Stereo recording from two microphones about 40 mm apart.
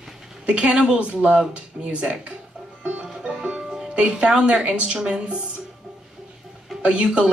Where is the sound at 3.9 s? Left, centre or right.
Right.